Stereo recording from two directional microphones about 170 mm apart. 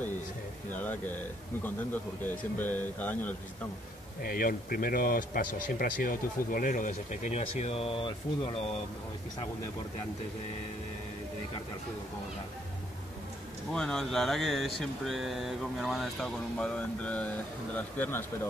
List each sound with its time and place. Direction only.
0.7 s speech: 10° left (ahead or behind)
4.2 s speech: 55° left (ahead or behind); by 8.1 s 35° left (ahead or behind)
13.7 s speech: 5° left (ahead or behind)